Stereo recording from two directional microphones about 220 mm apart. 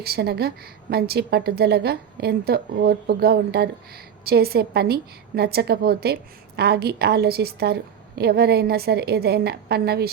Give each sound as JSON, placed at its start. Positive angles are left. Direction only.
{"t": 0.0, "sound": "a woman's voice", "side_deg": -45}